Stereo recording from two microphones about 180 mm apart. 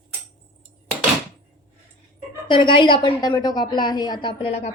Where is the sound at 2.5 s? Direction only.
25° left (ahead or behind).